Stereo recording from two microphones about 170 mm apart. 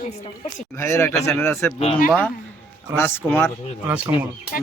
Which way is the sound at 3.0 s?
10° left (ahead or behind).